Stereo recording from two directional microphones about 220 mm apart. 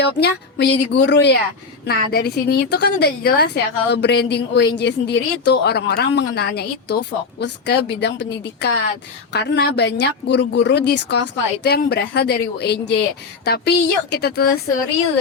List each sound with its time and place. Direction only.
0.0 s speech: 50° left (ahead or behind)